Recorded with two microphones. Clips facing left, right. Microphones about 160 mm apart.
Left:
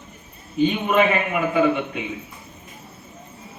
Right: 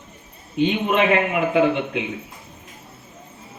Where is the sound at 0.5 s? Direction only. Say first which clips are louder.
Left 1 dB; 85° right.